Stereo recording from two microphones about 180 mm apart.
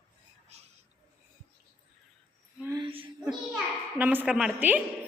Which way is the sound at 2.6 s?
15° right (ahead or behind).